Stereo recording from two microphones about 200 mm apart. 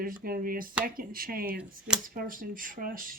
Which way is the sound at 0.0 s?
45° right (ahead or behind).